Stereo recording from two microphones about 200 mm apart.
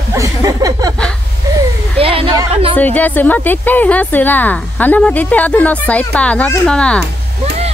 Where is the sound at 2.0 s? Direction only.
25° right (ahead or behind).